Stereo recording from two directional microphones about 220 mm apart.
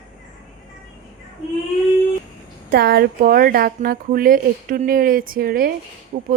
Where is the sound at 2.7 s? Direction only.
45° right (ahead or behind).